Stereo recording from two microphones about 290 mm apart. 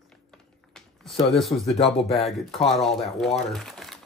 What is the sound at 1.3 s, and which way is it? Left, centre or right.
Speech, centre.